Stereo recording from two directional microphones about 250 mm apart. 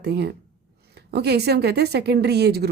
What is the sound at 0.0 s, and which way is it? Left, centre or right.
Speech, right.